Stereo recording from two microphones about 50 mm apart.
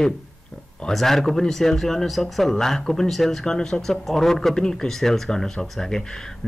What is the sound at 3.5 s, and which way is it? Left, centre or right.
Speech, centre.